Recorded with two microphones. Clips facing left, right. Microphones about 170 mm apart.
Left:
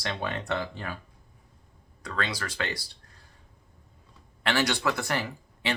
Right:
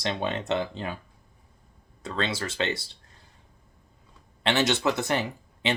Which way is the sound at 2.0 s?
25° right (ahead or behind).